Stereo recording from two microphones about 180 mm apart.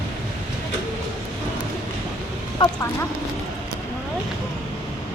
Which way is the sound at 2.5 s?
15° left (ahead or behind).